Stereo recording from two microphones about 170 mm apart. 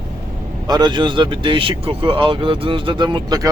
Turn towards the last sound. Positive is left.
turn(degrees=-25)  # may be behind; listen again after turning